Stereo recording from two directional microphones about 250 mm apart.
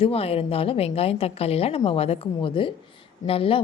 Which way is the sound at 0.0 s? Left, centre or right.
Left.